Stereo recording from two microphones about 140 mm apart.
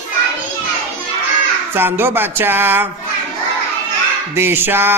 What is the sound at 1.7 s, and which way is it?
Mantra, 15° right (ahead or behind).